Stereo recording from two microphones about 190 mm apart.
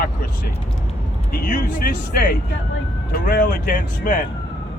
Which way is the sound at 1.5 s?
45° left (ahead or behind).